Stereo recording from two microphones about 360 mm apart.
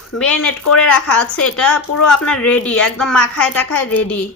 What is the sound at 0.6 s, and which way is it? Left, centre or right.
Speech, left.